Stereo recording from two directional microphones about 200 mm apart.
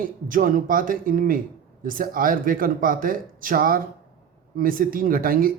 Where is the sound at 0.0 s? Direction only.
45° right (ahead or behind).